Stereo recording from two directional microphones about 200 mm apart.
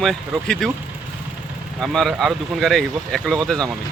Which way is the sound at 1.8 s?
Centre (ahead or behind).